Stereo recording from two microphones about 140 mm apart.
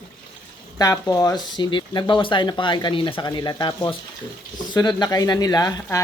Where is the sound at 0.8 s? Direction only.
25° left (ahead or behind).